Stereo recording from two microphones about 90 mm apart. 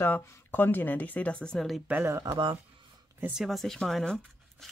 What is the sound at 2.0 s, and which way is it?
Speech, 30° right (ahead or behind).